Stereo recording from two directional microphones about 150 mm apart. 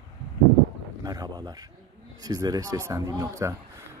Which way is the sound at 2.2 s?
25° right (ahead or behind).